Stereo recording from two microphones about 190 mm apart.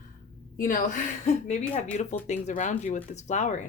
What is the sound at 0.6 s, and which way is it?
Speech, 45° left (ahead or behind).